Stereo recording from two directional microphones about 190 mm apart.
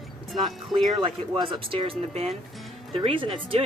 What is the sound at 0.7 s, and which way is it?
Speech, 25° right (ahead or behind).